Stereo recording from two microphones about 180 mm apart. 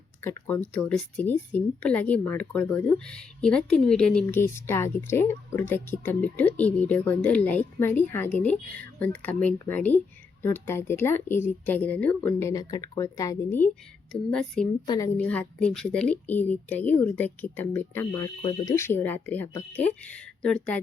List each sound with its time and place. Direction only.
0.2 s speech: 10° left (ahead or behind)
14.1 s speech: 5° left (ahead or behind)
14.8 s a woman's voice: 20° left (ahead or behind)
15.2 s a woman's voice: 5° left (ahead or behind)